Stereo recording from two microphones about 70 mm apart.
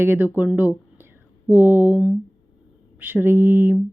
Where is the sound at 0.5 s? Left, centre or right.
Right.